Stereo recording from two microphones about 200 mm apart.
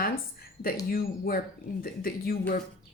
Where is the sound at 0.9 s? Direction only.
45° left (ahead or behind).